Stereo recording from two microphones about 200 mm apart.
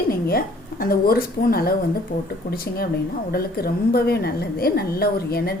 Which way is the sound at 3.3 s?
50° left (ahead or behind).